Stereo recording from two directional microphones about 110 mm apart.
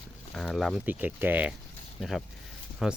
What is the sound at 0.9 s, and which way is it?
Speech, 15° right (ahead or behind).